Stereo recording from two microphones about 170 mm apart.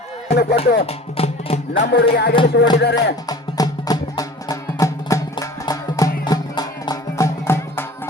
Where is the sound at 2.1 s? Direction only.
70° left (ahead or behind).